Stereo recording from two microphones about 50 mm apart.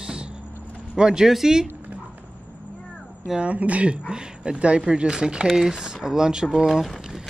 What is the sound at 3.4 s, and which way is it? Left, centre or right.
Speech, right.